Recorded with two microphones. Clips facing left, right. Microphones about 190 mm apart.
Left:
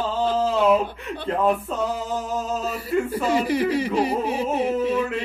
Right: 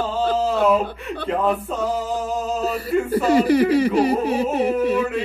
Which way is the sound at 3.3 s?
35° right (ahead or behind).